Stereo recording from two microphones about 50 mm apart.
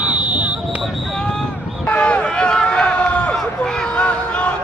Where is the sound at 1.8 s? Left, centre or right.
Left.